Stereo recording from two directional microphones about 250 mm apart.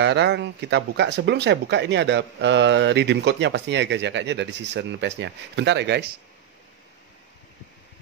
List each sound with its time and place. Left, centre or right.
0.0 s speech: right